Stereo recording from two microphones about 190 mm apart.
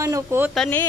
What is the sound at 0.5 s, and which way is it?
Speech, 5° left (ahead or behind).